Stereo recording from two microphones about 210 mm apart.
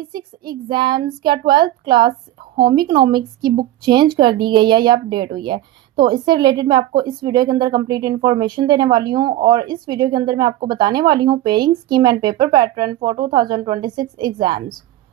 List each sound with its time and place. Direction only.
0.1 s a woman's voice: 20° right (ahead or behind)